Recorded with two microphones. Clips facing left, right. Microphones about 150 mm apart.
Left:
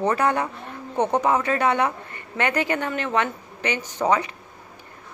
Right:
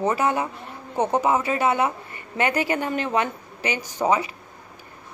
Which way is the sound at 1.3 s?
25° right (ahead or behind).